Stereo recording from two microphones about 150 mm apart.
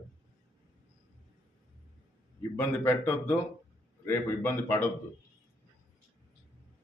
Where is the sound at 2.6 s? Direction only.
15° left (ahead or behind).